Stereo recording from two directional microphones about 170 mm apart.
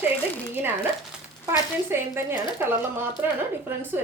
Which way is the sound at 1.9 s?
15° right (ahead or behind).